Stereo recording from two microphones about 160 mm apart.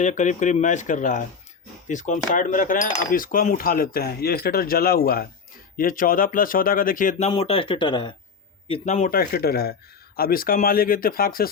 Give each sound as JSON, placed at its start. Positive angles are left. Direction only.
{"t": 0.0, "sound": "speech", "side_deg": 50}
{"t": 7.3, "sound": "speech", "side_deg": 35}
{"t": 8.6, "sound": "speech", "side_deg": 40}
{"t": 9.1, "sound": "speech", "side_deg": 70}